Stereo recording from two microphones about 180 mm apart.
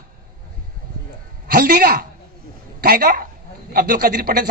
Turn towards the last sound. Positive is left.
turn(degrees=-55)  # may be behind; listen again after turning